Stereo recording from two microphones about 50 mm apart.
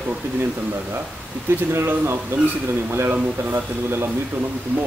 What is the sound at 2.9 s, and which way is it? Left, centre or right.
Speech, right.